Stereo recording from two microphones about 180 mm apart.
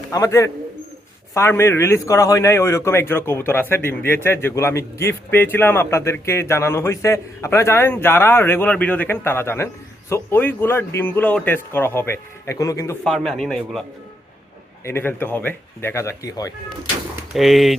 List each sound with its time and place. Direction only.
0.1 s a man's voice: 20° left (ahead or behind)
13.1 s a man's voice: centre (ahead or behind)
14.8 s a man's voice: 10° left (ahead or behind)
17.3 s a man's voice: centre (ahead or behind)